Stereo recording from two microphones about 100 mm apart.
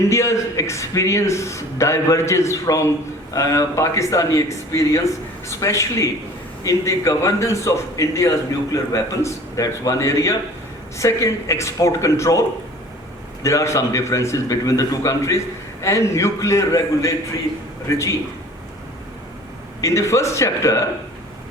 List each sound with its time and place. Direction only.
0.1 s a man's voice: 30° left (ahead or behind)
19.8 s a man's voice: 30° left (ahead or behind)